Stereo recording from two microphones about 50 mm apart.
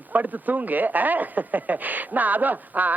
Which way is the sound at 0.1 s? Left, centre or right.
Right.